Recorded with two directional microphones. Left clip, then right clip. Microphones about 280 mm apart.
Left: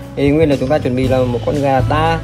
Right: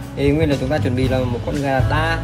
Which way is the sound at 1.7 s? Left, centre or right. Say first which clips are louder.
Left 4 dB; centre.